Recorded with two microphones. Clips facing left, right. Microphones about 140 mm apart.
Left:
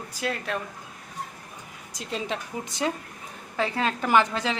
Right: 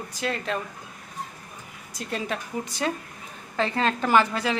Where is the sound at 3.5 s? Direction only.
10° left (ahead or behind).